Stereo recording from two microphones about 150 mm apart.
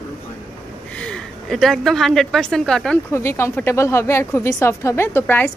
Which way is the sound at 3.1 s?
15° left (ahead or behind).